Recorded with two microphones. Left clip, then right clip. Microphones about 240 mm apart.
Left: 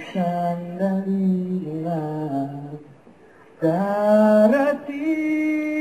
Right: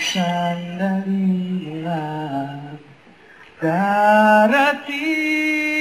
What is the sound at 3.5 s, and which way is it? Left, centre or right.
Mantra, right.